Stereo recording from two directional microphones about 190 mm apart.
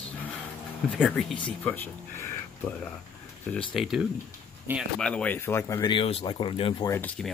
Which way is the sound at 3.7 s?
Centre (ahead or behind).